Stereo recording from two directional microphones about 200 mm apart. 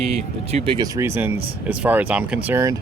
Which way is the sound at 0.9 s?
10° right (ahead or behind).